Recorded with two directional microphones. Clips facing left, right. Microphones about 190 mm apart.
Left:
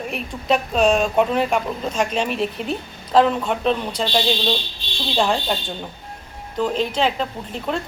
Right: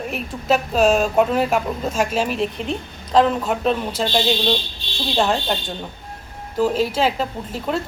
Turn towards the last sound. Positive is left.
turn(degrees=-5)  # may be behind; listen again after turning